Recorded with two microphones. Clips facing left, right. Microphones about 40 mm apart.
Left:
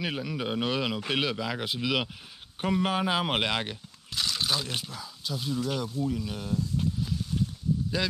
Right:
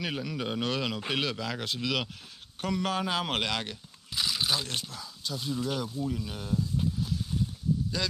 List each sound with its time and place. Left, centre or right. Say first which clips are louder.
0.0 s speech: left 1 dB; centre
4.1 s speech: even; centre
8.0 s speech: left 3 dB; centre